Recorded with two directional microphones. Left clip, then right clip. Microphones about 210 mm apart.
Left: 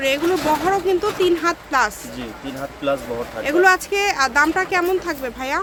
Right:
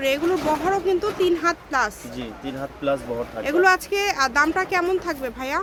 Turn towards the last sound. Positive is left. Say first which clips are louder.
# left 3 dB
turn(degrees=0)  # may be behind; listen again after turning